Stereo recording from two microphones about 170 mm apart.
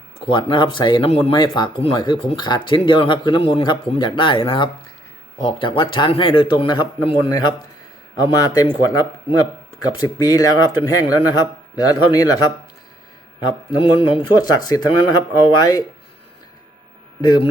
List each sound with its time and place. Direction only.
0.3 s a man's voice: 30° left (ahead or behind)
17.2 s speech: 25° left (ahead or behind)